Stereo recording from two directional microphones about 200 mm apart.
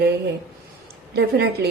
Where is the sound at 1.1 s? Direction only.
55° right (ahead or behind).